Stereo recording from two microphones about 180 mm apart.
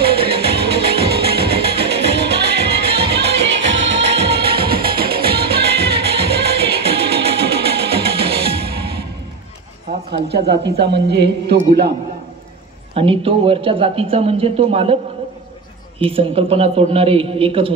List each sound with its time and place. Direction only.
0.0 s music: 60° right (ahead or behind)
10.2 s a man's voice: 65° right (ahead or behind)
12.9 s speech: 30° right (ahead or behind)
16.0 s speech: 30° right (ahead or behind)